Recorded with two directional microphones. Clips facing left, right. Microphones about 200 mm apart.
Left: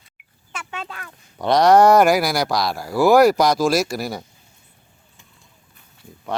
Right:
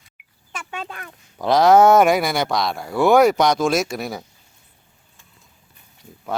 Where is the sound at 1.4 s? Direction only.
Centre (ahead or behind).